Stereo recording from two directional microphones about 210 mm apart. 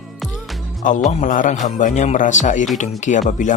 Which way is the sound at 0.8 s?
35° left (ahead or behind).